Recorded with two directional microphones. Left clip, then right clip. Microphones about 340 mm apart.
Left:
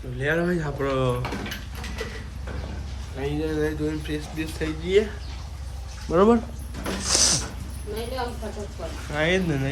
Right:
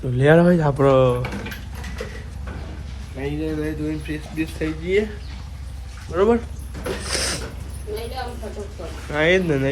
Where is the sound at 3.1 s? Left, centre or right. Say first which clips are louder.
Right 1 dB; centre.